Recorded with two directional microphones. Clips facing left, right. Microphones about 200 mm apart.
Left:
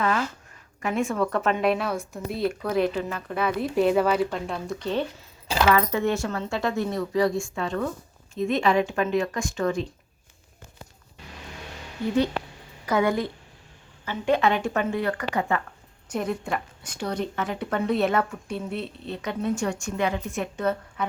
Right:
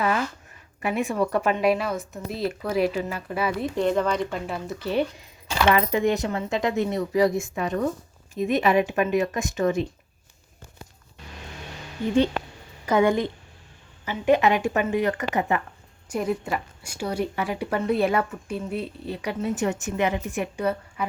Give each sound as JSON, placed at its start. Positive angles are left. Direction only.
{"t": 0.8, "sound": "speech", "side_deg": -15}
{"t": 3.8, "sound": "speech", "side_deg": 5}
{"t": 5.6, "sound": "speech", "side_deg": -20}
{"t": 12.9, "sound": "speech", "side_deg": -25}